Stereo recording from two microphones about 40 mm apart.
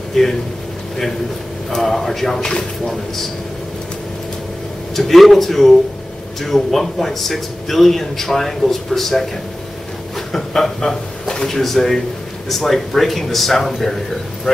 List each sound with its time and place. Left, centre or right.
0.1 s a man's voice: centre
1.8 s speech: centre
2.4 s speech: left
4.9 s a man's voice: centre